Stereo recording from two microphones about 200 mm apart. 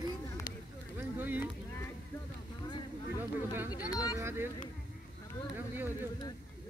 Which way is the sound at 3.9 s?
20° left (ahead or behind).